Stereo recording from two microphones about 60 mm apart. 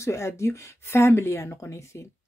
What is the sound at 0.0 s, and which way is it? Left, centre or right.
Speech, left.